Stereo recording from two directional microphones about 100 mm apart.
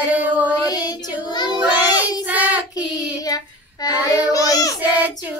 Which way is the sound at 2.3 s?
15° right (ahead or behind).